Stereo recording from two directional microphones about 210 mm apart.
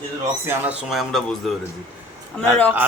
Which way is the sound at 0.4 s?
10° right (ahead or behind).